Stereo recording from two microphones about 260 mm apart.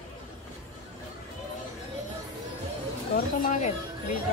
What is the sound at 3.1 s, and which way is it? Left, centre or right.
Speech, left.